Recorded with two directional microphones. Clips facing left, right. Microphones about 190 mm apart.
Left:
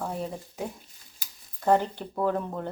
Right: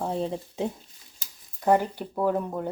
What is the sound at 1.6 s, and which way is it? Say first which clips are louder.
Speech: right 1 dB; 10° right (ahead or behind).